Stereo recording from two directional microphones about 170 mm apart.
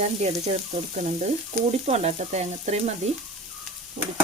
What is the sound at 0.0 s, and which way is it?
Speech, 40° right (ahead or behind).